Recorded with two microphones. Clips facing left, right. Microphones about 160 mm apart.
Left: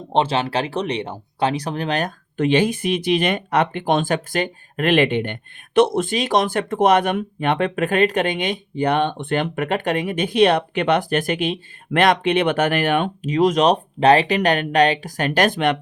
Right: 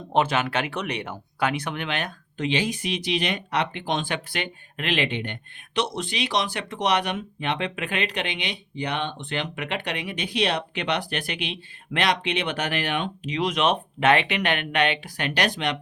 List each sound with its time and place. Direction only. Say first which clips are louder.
0.1 s speech: left 3 dB; 30° left (ahead or behind); by 15.8 s 55° left (ahead or behind)